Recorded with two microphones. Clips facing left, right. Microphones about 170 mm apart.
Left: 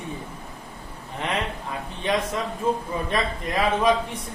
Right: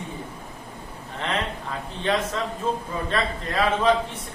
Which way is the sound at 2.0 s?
15° left (ahead or behind).